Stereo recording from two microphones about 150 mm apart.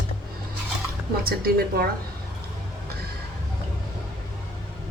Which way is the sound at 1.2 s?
90° right.